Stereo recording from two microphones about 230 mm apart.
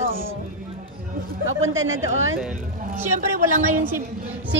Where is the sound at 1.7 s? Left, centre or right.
Right.